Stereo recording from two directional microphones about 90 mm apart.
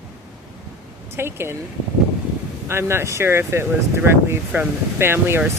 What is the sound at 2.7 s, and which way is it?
Speech, 30° right (ahead or behind).